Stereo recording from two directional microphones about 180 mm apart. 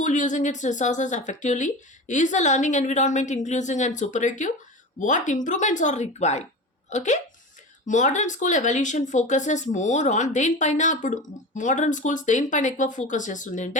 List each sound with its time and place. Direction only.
0.0 s speech: 45° left (ahead or behind)